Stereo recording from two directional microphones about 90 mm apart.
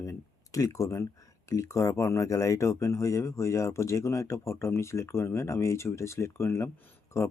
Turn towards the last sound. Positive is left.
turn(degrees=35)  # may be behind; listen again after turning